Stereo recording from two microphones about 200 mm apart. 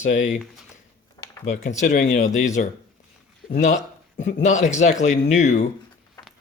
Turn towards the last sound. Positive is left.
turn(degrees=35)  # may be behind; listen again after turning